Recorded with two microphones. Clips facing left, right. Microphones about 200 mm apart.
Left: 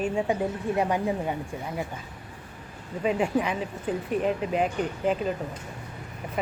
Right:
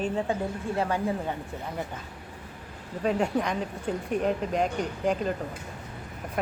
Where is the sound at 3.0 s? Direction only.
5° left (ahead or behind).